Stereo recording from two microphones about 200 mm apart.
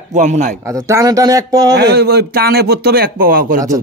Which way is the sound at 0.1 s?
35° right (ahead or behind).